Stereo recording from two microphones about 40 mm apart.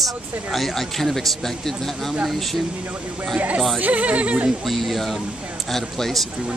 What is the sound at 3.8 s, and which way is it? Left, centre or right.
Speech, right.